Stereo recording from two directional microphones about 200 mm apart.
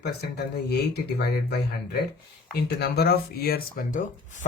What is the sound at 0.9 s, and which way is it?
Speech, 55° left (ahead or behind).